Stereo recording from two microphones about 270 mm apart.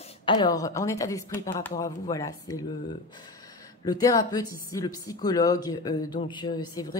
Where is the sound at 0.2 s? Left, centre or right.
Centre.